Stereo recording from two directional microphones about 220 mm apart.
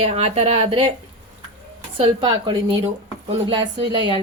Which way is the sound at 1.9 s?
25° right (ahead or behind).